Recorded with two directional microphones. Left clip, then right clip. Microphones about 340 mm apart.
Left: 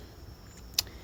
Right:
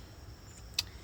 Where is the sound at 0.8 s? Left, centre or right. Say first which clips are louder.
Left 4 dB; centre.